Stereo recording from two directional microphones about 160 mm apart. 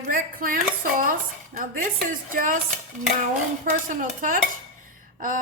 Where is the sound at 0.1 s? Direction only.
60° right (ahead or behind).